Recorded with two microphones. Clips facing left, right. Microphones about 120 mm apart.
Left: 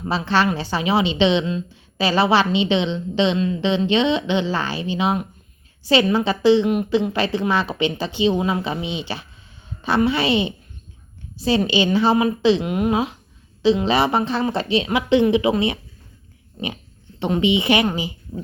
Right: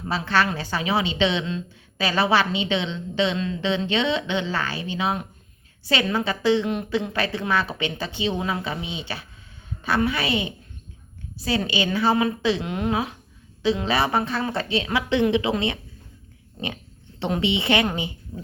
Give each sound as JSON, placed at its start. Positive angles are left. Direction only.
{"t": 0.1, "sound": "a woman's voice", "side_deg": 20}
{"t": 12.9, "sound": "a woman's voice", "side_deg": 20}
{"t": 16.6, "sound": "pig", "side_deg": 0}
{"t": 17.2, "sound": "a woman's voice", "side_deg": 5}